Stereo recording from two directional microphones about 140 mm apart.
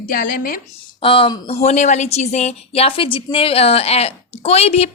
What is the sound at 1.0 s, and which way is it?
Speech, 40° left (ahead or behind).